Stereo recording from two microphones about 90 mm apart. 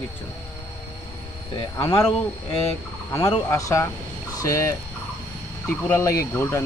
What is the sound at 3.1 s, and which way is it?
Speech, 30° left (ahead or behind).